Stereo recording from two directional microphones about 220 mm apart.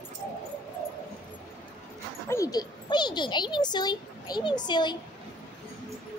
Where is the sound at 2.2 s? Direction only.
15° left (ahead or behind).